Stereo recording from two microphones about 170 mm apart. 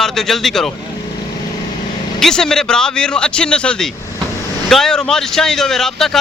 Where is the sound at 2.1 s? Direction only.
5° left (ahead or behind).